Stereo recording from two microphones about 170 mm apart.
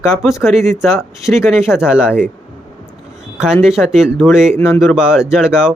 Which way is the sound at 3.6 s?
Centre (ahead or behind).